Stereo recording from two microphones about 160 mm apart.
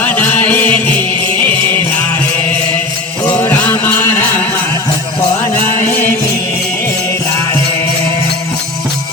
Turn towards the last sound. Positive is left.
turn(degrees=15)  # may be behind; listen again after turning